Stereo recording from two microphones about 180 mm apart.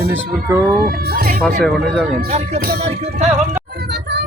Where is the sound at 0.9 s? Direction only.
55° right (ahead or behind).